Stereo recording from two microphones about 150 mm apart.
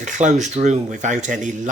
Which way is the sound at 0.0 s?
55° right (ahead or behind).